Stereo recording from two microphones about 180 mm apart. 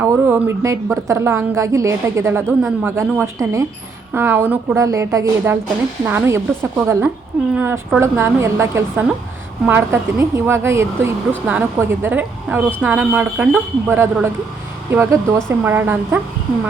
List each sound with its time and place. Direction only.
0.0 s speech: 15° right (ahead or behind)